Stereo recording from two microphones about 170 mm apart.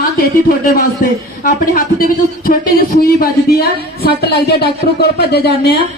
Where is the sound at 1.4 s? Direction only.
55° left (ahead or behind); by 5.7 s 75° left (ahead or behind).